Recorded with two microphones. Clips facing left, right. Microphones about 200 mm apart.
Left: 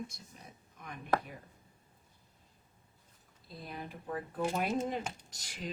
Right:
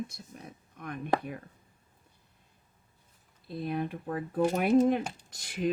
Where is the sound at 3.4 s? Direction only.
65° right (ahead or behind).